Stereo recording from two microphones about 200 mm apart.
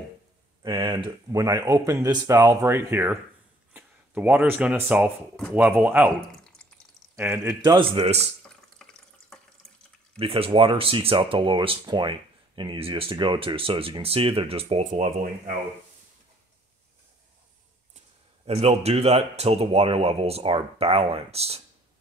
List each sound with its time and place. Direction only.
0.7 s speech: 25° right (ahead or behind); by 6.5 s centre (ahead or behind)
7.2 s speech: 15° right (ahead or behind)
8.8 s water: 5° left (ahead or behind)
10.1 s speech: 30° right (ahead or behind)
17.9 s speech: 30° right (ahead or behind)